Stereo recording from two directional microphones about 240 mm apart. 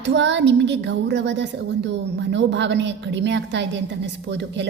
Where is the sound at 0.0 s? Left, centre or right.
Right.